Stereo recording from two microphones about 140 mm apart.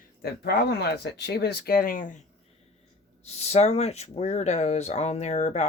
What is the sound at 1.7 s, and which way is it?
Speech, 90° left.